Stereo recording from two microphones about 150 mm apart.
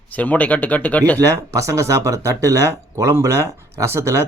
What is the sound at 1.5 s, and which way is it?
Speech, 20° right (ahead or behind).